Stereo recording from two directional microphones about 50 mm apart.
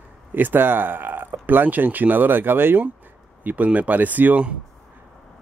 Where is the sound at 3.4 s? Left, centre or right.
Right.